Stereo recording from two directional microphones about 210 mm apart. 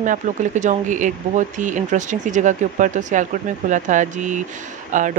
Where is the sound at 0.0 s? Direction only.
35° right (ahead or behind).